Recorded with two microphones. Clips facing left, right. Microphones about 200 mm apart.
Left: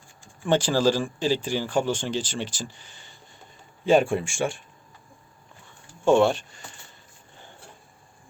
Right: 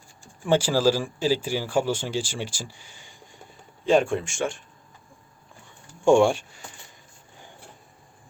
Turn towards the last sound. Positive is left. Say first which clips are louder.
# right 1 dB
turn(degrees=-10)  # may be behind; listen again after turning